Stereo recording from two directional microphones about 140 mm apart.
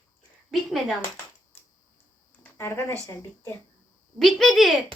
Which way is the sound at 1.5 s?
15° left (ahead or behind).